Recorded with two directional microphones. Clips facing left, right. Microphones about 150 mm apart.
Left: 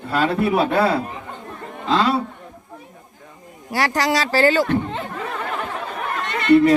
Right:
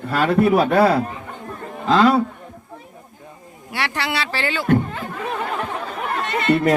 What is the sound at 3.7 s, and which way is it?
Speech, 40° left (ahead or behind).